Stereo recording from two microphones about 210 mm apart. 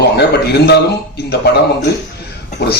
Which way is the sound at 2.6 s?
50° left (ahead or behind).